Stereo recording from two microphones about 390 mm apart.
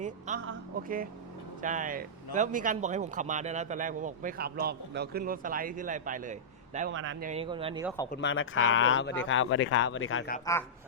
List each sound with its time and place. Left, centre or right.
0.4 s a man's voice: right
8.1 s speech: left
10.4 s speech: centre